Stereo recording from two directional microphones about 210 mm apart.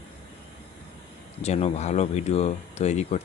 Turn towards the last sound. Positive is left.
turn(degrees=30)  # may be behind; listen again after turning